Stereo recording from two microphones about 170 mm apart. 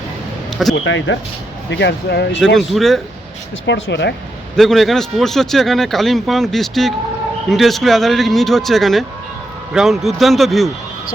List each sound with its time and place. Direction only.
0.9 s speech: 90° left; by 2.4 s 75° left (ahead or behind)
2.6 s a man's voice: centre (ahead or behind)
3.7 s speech: 90° left
4.5 s a man's voice: centre (ahead or behind)